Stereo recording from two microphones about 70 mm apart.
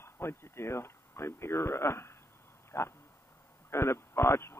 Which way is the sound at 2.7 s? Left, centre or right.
Left.